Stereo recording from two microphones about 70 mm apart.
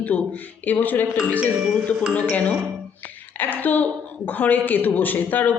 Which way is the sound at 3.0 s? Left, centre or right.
Left.